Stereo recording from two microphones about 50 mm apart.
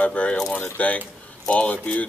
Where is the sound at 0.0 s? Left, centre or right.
Left.